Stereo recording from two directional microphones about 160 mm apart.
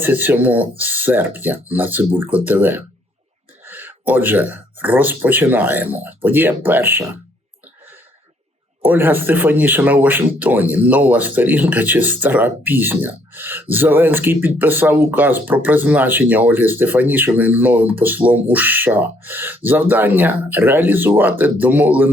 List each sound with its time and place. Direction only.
0.0 s speech: 10° right (ahead or behind)
8.8 s speech: 10° right (ahead or behind)